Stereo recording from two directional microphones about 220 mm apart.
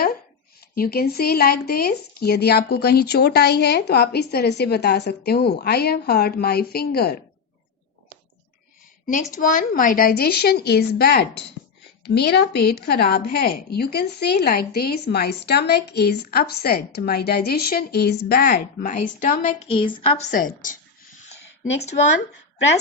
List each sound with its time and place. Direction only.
0.8 s a woman's voice: 45° left (ahead or behind)
9.3 s a woman's voice: 40° left (ahead or behind)